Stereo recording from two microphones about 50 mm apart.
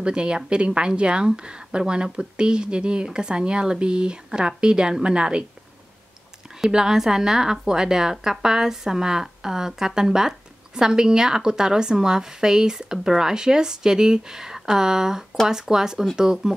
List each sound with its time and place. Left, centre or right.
0.0 s speech: centre
6.7 s speech: centre